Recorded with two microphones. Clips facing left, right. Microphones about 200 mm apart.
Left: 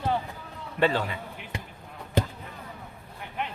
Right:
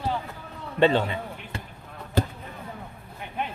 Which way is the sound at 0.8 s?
25° right (ahead or behind).